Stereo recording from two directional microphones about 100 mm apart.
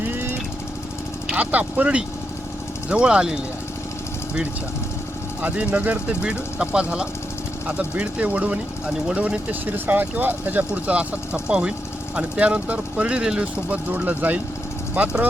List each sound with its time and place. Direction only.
0.1 s jackhammer: 20° right (ahead or behind)
1.3 s speech: 15° right (ahead or behind)
5.4 s speech: 15° right (ahead or behind)